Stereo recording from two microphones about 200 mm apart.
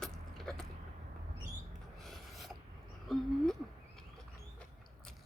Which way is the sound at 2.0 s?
Centre (ahead or behind).